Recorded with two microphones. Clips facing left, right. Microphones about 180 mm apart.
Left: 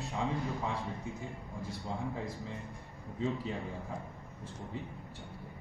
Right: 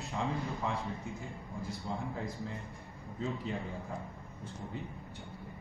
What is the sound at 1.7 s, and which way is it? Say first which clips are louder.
Speech: left 1 dB; centre (ahead or behind).